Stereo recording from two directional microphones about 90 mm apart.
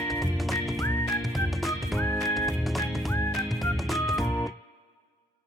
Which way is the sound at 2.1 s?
Centre (ahead or behind).